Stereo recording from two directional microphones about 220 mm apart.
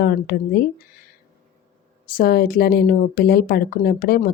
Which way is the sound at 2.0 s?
40° left (ahead or behind).